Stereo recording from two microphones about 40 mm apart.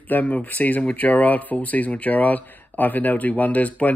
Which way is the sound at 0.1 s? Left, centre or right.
Left.